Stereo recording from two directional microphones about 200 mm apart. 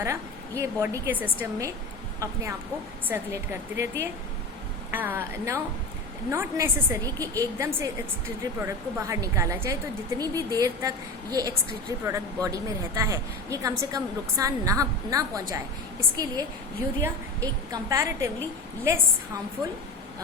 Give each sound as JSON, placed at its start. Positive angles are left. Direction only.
{"t": 0.0, "sound": "a woman's voice", "side_deg": -15}